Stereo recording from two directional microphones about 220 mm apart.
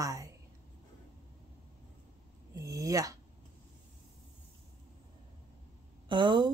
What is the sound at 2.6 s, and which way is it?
Speech, 15° right (ahead or behind).